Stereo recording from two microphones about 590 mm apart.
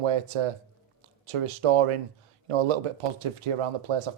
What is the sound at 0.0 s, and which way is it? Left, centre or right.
Speech, right.